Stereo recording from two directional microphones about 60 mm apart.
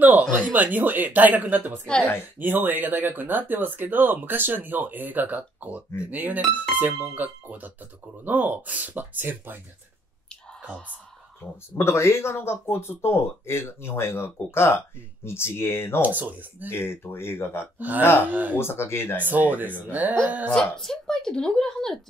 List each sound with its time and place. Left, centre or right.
0.3 s speech: right
11.7 s speech: left
16.0 s speech: right
16.6 s speech: left
17.7 s speech: right
18.6 s speech: left
19.2 s speech: right
20.5 s speech: centre